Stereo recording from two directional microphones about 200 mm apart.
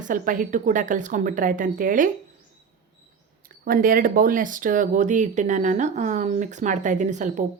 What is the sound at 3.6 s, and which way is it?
Speech, 45° right (ahead or behind).